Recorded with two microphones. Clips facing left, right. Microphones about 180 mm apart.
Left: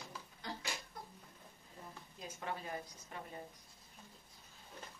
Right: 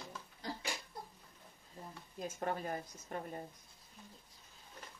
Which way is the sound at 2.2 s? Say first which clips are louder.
Right 6 dB; 45° right (ahead or behind).